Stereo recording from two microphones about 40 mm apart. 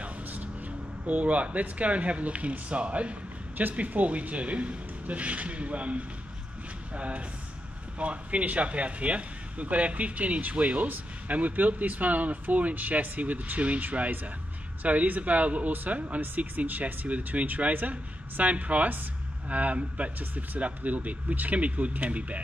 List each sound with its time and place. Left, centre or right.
0.3 s speech: right
3.5 s speech: right